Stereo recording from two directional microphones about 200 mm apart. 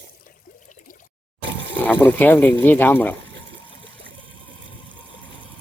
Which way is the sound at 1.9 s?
10° left (ahead or behind).